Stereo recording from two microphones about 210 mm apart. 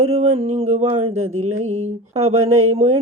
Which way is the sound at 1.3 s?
90° right.